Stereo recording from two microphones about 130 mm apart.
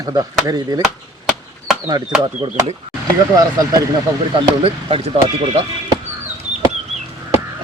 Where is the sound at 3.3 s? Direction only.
30° right (ahead or behind).